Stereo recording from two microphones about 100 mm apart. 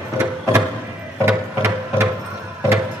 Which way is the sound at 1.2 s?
25° right (ahead or behind).